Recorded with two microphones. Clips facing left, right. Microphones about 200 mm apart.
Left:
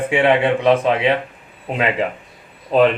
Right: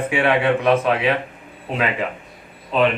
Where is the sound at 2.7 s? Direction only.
40° left (ahead or behind).